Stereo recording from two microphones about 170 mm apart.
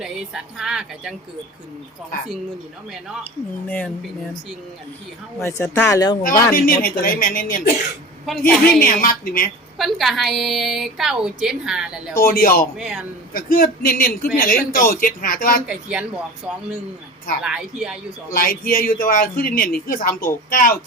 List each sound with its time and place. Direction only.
0.0 s a woman's voice: 5° right (ahead or behind)
3.7 s speech: 10° left (ahead or behind)
5.4 s speech: 15° left (ahead or behind)
6.5 s speech: 55° left (ahead or behind)
8.4 s a woman's voice: 5° left (ahead or behind)
8.8 s speech: 55° left (ahead or behind)
9.7 s a woman's voice: centre (ahead or behind)
12.1 s speech: 60° left (ahead or behind)
12.7 s a woman's voice: centre (ahead or behind)
13.3 s speech: 55° left (ahead or behind)
15.6 s a woman's voice: 5° right (ahead or behind)
18.3 s speech: 60° left (ahead or behind)